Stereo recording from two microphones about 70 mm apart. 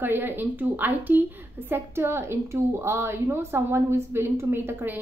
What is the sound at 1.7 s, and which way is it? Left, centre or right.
A woman's voice, right.